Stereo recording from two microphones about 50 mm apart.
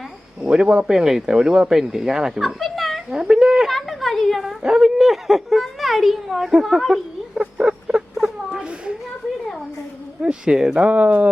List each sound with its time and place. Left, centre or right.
0.4 s speech: centre
2.4 s speech: centre
3.7 s a child's voice: centre
4.6 s speech: centre
4.9 s a child's voice: centre
6.5 s a sound: centre
10.2 s speech: centre
10.8 s speech: right